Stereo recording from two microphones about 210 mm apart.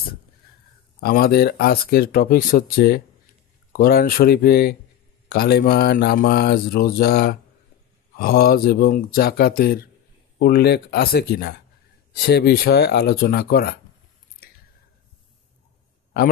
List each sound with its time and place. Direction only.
1.0 s speech: 50° left (ahead or behind)